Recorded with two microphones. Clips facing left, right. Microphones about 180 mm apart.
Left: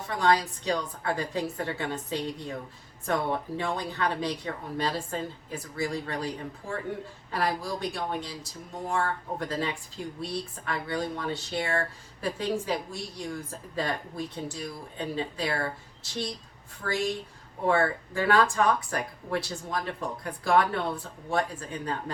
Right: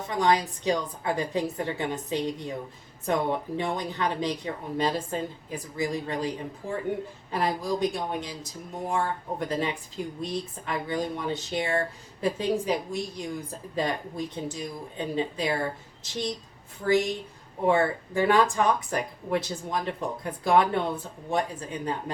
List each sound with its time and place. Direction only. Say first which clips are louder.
0.1 s speech: right 1 dB; 20° right (ahead or behind)